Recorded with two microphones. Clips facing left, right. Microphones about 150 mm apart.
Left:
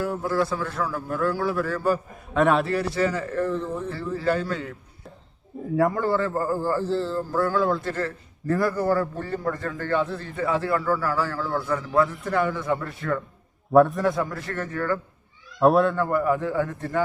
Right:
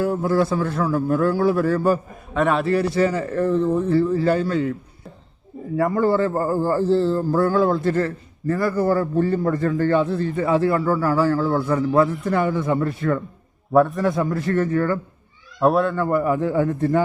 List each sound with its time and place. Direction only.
0.0 s a man's voice: 30° right (ahead or behind)
2.3 s speech: centre (ahead or behind)
2.9 s a man's voice: 25° right (ahead or behind)
5.6 s speech: centre (ahead or behind)
6.1 s a man's voice: 25° right (ahead or behind)
6.9 s speech: 50° right (ahead or behind)
7.3 s a man's voice: 35° right (ahead or behind)
8.4 s speech: centre (ahead or behind)
9.0 s a man's voice: 25° right (ahead or behind)
13.7 s speech: centre (ahead or behind)
14.3 s a man's voice: 20° right (ahead or behind)
15.5 s speech: centre (ahead or behind)
16.2 s a man's voice: 20° right (ahead or behind)